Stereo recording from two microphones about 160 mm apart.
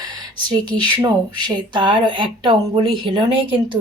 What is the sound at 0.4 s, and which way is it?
Speech, 25° right (ahead or behind).